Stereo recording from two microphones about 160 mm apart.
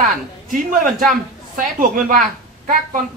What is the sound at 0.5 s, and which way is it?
A woman's voice, 55° right (ahead or behind).